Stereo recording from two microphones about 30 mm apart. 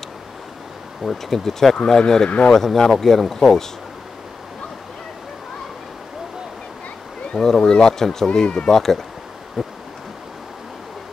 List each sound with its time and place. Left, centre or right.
1.0 s speech: centre
1.9 s speech: left
2.5 s speech: centre
7.3 s speech: centre
9.6 s a sound: centre